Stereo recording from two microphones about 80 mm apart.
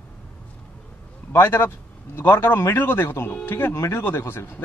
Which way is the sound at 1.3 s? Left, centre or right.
Left.